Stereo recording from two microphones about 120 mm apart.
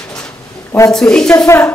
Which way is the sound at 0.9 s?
5° left (ahead or behind).